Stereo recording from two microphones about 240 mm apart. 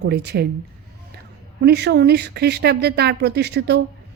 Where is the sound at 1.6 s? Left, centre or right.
Right.